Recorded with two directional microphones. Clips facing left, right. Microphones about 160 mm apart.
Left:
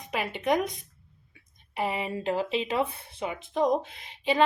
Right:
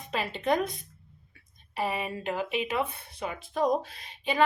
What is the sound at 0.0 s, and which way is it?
A woman's voice, 15° left (ahead or behind).